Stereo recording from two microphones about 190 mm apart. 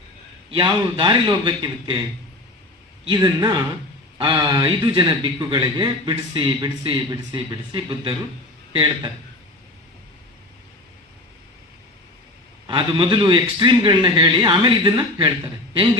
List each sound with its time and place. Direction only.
0.5 s a man's voice: 25° right (ahead or behind)
3.1 s a man's voice: 20° right (ahead or behind)
12.6 s a man's voice: 25° right (ahead or behind)